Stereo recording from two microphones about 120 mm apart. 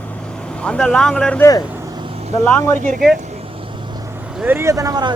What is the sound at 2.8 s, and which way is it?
Speech, 90° right.